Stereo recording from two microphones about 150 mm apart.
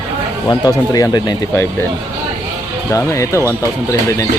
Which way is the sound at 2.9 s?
20° left (ahead or behind).